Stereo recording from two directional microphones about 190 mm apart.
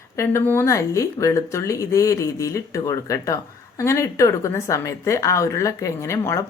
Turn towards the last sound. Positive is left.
turn(degrees=15)  # may be behind; listen again after turning